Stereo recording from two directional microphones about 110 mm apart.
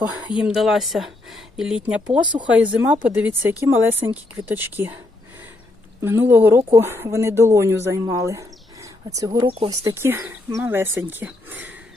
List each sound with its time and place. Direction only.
0.3 s speech: 5° right (ahead or behind)
2.2 s speech: 45° right (ahead or behind)
2.5 s speech: 10° right (ahead or behind)
6.0 s speech: 20° right (ahead or behind)